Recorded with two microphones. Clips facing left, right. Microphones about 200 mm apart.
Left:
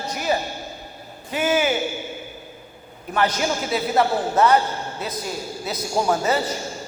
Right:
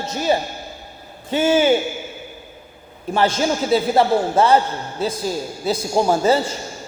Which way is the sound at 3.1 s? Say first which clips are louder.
Right 3 dB; 30° right (ahead or behind).